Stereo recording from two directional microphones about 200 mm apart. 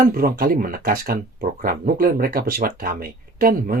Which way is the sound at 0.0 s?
45° right (ahead or behind).